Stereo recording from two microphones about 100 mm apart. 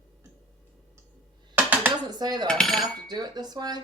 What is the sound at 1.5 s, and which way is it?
Dishes, 20° right (ahead or behind).